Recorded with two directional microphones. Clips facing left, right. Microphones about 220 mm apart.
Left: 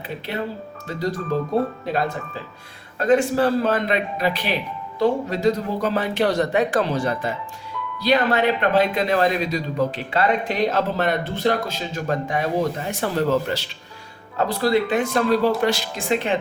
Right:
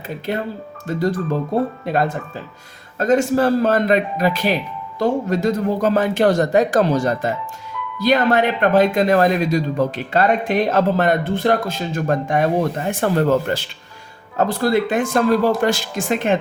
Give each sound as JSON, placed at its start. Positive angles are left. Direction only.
{"t": 0.3, "sound": "speech", "side_deg": -50}
{"t": 3.0, "sound": "speech", "side_deg": -40}